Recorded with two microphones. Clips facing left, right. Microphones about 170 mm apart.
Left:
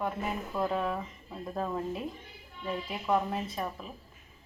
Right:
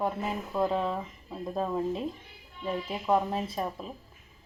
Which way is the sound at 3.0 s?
25° right (ahead or behind).